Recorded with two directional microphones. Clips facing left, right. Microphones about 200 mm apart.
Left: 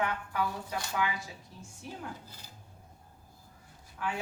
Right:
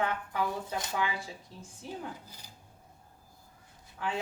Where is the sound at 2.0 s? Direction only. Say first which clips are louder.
Right 1 dB; 15° right (ahead or behind).